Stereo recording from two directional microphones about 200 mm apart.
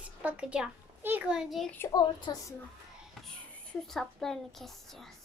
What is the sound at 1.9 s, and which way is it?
Speech, 20° left (ahead or behind).